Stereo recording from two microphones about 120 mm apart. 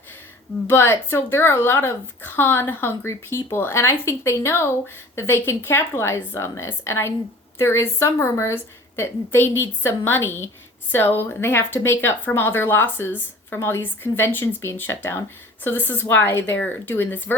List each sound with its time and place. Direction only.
0.7 s speech: 20° left (ahead or behind)